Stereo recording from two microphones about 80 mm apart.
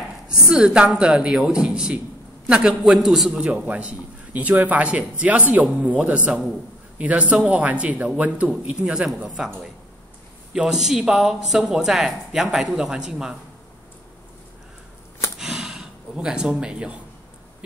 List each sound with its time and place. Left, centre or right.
0.3 s a man's voice: centre
3.4 s a man's voice: centre
10.5 s speech: centre
15.3 s a sound: centre